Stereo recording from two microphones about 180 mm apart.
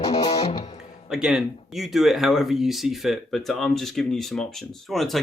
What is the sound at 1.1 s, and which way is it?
Speech, 5° right (ahead or behind).